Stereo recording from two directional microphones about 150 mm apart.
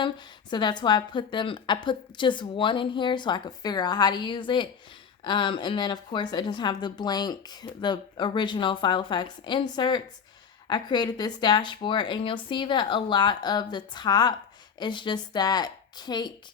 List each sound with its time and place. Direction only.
0.5 s a woman's voice: 30° left (ahead or behind)